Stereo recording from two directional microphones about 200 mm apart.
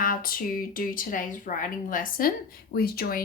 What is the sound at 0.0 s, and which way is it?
A woman's voice, 45° left (ahead or behind).